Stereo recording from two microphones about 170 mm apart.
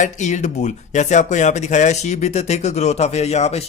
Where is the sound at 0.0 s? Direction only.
45° left (ahead or behind).